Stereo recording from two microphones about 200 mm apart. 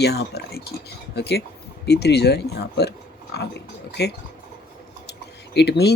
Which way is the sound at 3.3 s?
55° left (ahead or behind).